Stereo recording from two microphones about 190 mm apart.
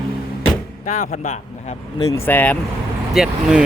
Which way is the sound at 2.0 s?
15° left (ahead or behind).